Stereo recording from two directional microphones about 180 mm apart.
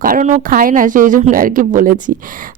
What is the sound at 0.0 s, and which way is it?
Speech, 45° right (ahead or behind).